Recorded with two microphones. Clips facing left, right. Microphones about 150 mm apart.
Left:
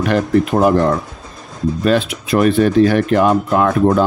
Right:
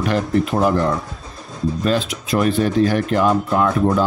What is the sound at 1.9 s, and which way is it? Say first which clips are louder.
Speech: left 6 dB; 60° left (ahead or behind).